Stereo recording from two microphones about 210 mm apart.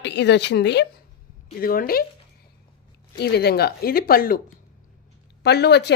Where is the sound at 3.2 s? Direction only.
50° left (ahead or behind).